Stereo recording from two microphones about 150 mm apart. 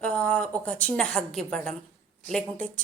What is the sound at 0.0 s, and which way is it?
A woman's voice, 10° left (ahead or behind).